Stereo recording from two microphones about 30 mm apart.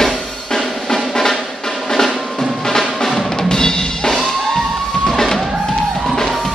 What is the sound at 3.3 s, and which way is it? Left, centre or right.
Drum, centre.